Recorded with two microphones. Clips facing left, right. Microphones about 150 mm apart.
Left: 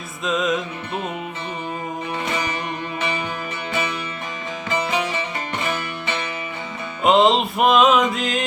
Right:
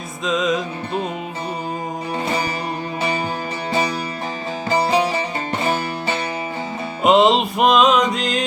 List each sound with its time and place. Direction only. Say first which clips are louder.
0.3 s music: right 2 dB; centre (ahead or behind)
3.7 s music: right 5 dB; 35° right (ahead or behind)
7.0 s music: right 2 dB; centre (ahead or behind)